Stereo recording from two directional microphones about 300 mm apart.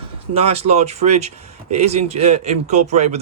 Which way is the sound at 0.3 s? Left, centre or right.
Right.